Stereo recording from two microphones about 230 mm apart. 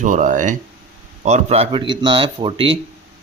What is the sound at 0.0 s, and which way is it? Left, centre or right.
A man's voice, right.